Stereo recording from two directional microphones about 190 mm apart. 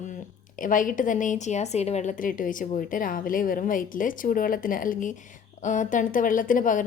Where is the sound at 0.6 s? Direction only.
45° left (ahead or behind).